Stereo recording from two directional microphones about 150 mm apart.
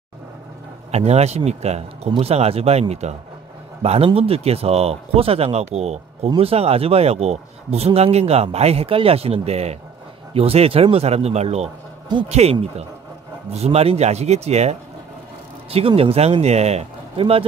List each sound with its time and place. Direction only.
0.9 s a man's voice: 45° right (ahead or behind)